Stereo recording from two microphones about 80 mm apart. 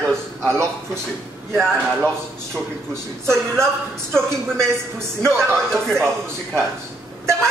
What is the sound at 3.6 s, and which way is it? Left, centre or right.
Speech, centre.